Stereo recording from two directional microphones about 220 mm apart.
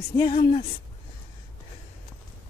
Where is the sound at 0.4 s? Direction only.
25° left (ahead or behind).